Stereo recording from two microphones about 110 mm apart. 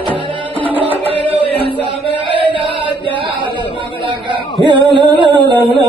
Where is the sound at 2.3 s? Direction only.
50° right (ahead or behind).